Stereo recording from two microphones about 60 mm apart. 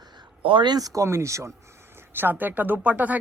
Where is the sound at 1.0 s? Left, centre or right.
Right.